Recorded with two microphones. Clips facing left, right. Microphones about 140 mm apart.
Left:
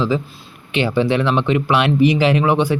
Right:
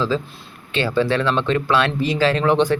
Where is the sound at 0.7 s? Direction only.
15° left (ahead or behind).